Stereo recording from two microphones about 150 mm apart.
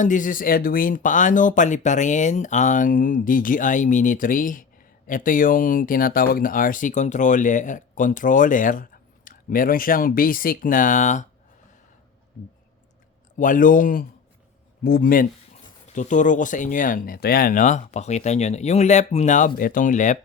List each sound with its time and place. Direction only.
0.0 s speech: 60° left (ahead or behind)
13.3 s speech: 60° left (ahead or behind)
16.0 s speech: 55° left (ahead or behind)